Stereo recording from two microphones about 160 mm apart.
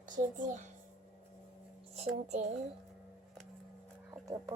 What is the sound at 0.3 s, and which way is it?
Speech, 55° right (ahead or behind).